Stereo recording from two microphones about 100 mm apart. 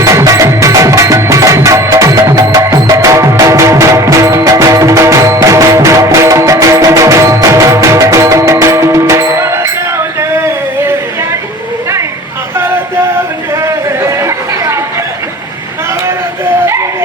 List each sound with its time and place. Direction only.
0.0 s music: 30° right (ahead or behind)
10.2 s a sound: 25° right (ahead or behind)
14.1 s chatter: 30° right (ahead or behind)